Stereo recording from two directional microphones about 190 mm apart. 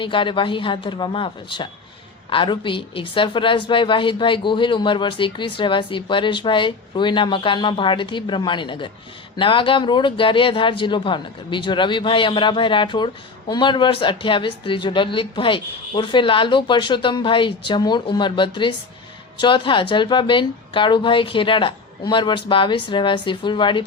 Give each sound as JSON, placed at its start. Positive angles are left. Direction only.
{"t": 0.0, "sound": "a woman's voice", "side_deg": 25}